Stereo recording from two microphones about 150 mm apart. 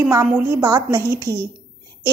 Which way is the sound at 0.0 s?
20° right (ahead or behind).